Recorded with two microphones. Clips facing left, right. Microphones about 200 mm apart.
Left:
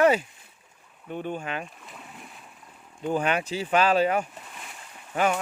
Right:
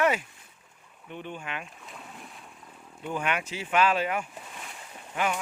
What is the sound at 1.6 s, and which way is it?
Boat, centre (ahead or behind).